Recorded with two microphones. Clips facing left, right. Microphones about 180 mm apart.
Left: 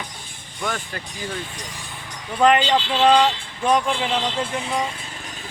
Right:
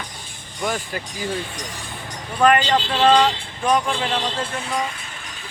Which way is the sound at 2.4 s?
15° left (ahead or behind).